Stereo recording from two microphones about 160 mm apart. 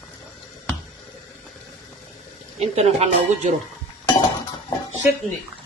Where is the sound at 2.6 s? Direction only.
40° right (ahead or behind).